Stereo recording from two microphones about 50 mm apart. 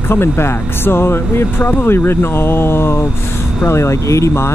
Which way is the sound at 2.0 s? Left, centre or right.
Left.